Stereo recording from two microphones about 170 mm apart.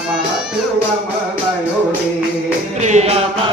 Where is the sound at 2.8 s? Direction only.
40° right (ahead or behind).